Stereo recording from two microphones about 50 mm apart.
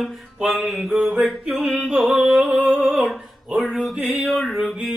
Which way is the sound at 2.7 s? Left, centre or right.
Right.